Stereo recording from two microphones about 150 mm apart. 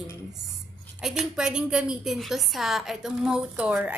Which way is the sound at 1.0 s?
5° right (ahead or behind).